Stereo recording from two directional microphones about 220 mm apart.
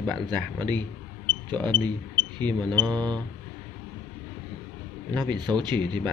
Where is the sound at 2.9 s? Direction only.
20° right (ahead or behind).